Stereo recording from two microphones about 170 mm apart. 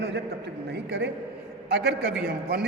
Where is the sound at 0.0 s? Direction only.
80° right.